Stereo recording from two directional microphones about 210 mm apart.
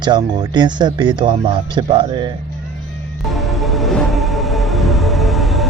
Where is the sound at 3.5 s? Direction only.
Centre (ahead or behind).